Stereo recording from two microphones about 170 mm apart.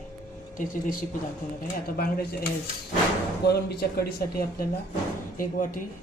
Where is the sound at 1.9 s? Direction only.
65° left (ahead or behind).